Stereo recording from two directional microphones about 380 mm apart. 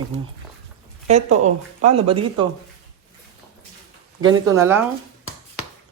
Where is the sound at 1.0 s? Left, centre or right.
Centre.